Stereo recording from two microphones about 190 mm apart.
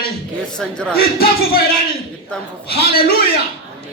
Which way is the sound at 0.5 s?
5° left (ahead or behind).